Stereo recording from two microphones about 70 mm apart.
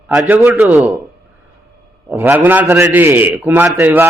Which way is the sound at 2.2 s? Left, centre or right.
Right.